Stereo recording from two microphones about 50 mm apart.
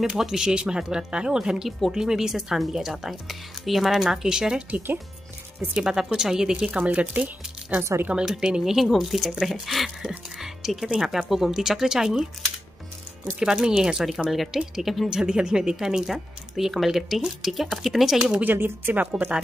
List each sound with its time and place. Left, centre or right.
0.2 s speech: centre
4.6 s speech: right
5.8 s speech: centre
6.9 s speech: right
8.3 s speech: centre
13.4 s speech: centre
14.3 s speech: centre
18.4 s speech: right